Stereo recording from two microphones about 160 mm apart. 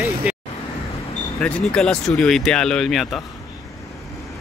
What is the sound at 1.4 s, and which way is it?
Speech, 5° left (ahead or behind).